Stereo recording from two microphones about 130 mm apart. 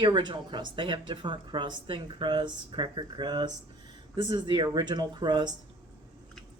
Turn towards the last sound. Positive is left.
turn(degrees=-35)  # may be behind; listen again after turning